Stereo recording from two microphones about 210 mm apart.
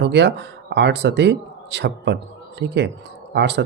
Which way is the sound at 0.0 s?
55° right (ahead or behind).